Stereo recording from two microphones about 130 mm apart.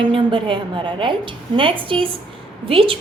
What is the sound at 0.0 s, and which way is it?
A woman's voice, 40° right (ahead or behind).